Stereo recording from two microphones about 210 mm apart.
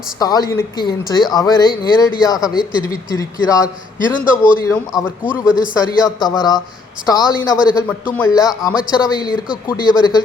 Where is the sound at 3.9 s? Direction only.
40° left (ahead or behind).